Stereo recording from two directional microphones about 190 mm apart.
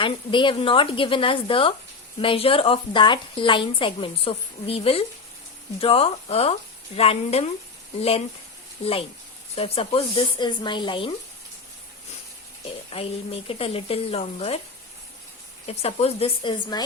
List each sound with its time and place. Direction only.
0.0 s speech: 25° left (ahead or behind)
8.8 s speech: 30° left (ahead or behind)
12.9 s speech: 30° left (ahead or behind)
15.6 s speech: 35° left (ahead or behind)